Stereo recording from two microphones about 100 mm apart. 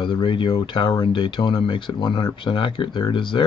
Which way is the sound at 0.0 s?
50° left (ahead or behind).